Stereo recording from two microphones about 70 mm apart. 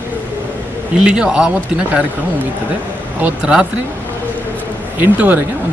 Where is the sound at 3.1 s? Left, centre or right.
Right.